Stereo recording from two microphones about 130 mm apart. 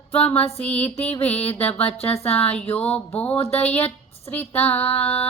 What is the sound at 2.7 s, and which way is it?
Speech, 50° left (ahead or behind).